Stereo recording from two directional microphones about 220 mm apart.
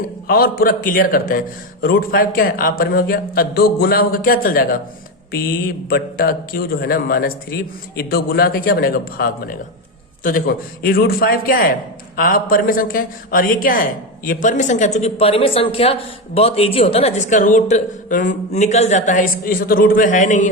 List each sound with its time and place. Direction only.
0.3 s a woman's voice: 45° left (ahead or behind)